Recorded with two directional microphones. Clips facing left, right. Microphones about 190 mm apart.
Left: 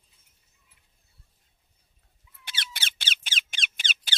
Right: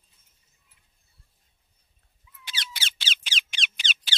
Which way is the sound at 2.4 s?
55° left (ahead or behind).